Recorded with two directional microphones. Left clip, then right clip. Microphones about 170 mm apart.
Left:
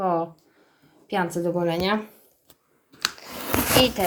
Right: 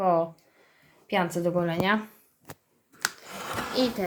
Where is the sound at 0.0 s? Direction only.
15° right (ahead or behind).